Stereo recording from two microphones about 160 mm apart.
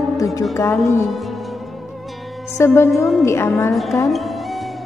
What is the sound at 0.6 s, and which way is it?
Music, 15° left (ahead or behind).